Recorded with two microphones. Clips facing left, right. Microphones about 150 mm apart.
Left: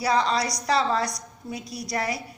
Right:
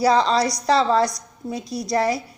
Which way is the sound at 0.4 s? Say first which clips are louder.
Right 5 dB; 30° right (ahead or behind).